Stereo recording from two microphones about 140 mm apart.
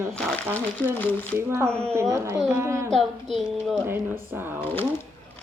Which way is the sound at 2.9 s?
Centre (ahead or behind).